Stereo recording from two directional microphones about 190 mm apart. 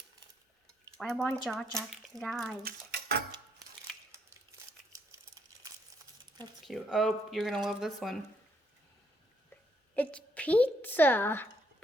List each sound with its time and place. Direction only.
0.9 s speech: centre (ahead or behind)
2.6 s dishes: 55° right (ahead or behind)
6.7 s speech: centre (ahead or behind)
9.9 s a woman's voice: 5° left (ahead or behind)